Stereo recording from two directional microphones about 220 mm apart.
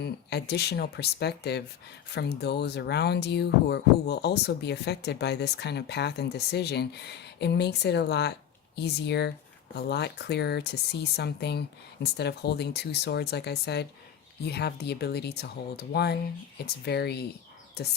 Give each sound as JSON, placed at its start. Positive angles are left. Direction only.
{"t": 0.0, "sound": "speech", "side_deg": 50}